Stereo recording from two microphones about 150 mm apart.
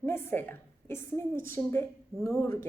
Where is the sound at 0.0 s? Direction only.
15° left (ahead or behind).